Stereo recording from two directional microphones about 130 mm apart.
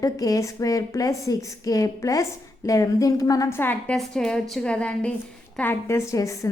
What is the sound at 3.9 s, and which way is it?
A woman's voice, 5° left (ahead or behind).